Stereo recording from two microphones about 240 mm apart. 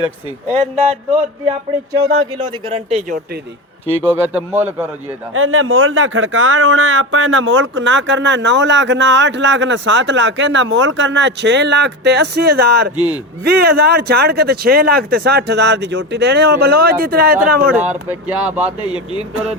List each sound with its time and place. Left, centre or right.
2.0 s speech: centre
4.0 s a man's voice: centre
5.3 s speech: right
17.7 s speech: centre